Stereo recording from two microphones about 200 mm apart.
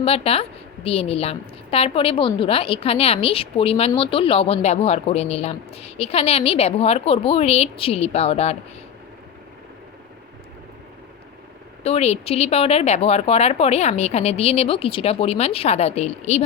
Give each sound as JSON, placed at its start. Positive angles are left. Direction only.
{"t": 0.0, "sound": "a woman's voice", "side_deg": 30}
{"t": 11.8, "sound": "speech", "side_deg": 30}